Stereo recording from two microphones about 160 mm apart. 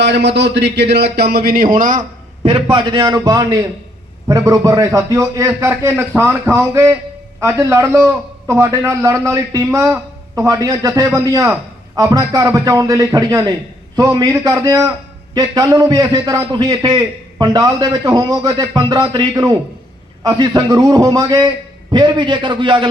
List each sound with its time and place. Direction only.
0.0 s speech: 90° right; by 2.0 s 55° right (ahead or behind)
2.4 s a man's voice: 35° right (ahead or behind)
3.0 s a man's voice: 25° right (ahead or behind)